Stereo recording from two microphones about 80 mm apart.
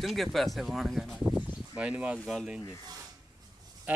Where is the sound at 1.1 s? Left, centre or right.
Centre.